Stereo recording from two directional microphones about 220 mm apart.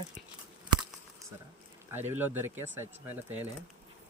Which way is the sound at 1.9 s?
10° right (ahead or behind).